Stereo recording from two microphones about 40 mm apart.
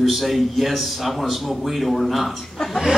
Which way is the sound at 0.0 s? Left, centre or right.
Centre.